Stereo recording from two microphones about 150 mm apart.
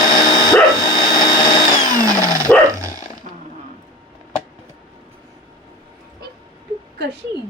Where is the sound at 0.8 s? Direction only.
30° left (ahead or behind).